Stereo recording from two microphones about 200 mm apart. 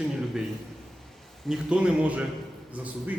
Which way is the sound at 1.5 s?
5° right (ahead or behind).